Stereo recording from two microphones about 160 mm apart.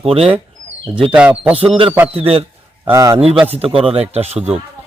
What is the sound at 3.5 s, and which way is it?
Speech, 35° right (ahead or behind).